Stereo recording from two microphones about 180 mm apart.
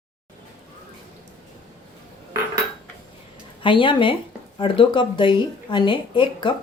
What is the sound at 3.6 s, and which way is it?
Speech, 30° left (ahead or behind).